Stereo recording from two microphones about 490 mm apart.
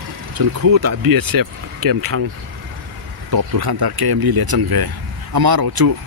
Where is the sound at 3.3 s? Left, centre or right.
Right.